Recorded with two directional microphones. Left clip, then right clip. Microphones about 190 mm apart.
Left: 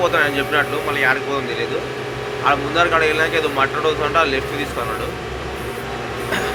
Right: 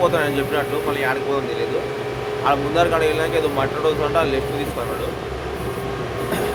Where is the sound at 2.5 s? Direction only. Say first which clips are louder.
Left 2 dB; 15° right (ahead or behind).